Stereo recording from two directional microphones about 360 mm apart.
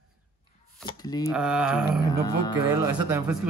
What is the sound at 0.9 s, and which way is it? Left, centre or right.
Speech, centre.